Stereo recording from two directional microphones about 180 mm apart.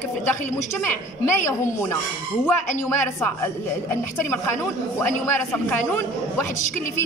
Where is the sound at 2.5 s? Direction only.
10° left (ahead or behind).